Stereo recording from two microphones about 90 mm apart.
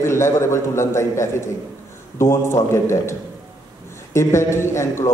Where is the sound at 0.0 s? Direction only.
30° left (ahead or behind).